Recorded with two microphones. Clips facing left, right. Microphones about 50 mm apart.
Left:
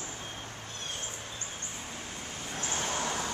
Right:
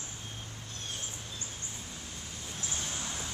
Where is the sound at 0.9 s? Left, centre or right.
Left.